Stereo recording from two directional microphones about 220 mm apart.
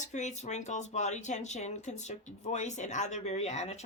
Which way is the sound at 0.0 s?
35° left (ahead or behind).